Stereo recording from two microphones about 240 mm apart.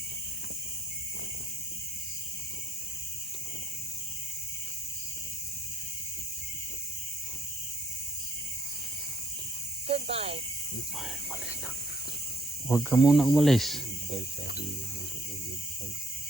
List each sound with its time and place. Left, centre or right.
9.8 s snake: right
12.6 s speech: centre